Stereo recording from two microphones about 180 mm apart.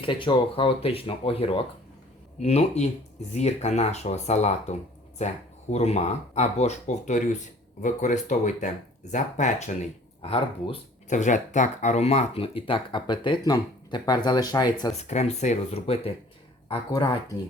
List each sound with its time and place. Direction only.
0.0 s speech: 30° left (ahead or behind)
11.1 s speech: 45° left (ahead or behind); by 14.9 s 20° left (ahead or behind)
15.0 s speech: 40° left (ahead or behind); by 17.3 s 20° left (ahead or behind)